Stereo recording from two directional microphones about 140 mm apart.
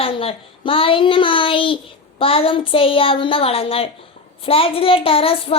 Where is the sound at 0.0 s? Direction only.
40° left (ahead or behind).